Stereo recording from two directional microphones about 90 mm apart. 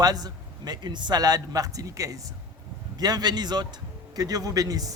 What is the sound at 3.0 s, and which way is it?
Speech, 50° right (ahead or behind).